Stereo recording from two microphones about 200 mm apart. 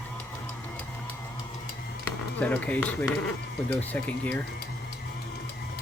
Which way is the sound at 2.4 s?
5° left (ahead or behind).